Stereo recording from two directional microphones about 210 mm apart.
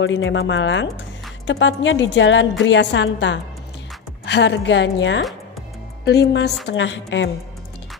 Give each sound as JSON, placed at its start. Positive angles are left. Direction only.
{"t": 0.0, "sound": "a woman's voice", "side_deg": 60}